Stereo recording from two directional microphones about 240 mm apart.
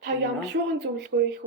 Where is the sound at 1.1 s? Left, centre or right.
Right.